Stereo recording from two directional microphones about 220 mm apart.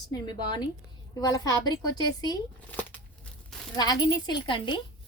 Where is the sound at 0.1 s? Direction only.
20° left (ahead or behind).